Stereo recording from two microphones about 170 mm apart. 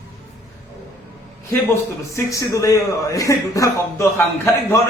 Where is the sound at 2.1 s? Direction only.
20° left (ahead or behind).